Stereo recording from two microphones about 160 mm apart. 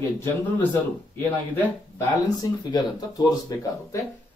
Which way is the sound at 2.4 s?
25° left (ahead or behind).